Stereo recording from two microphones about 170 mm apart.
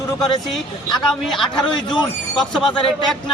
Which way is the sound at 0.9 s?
Centre (ahead or behind).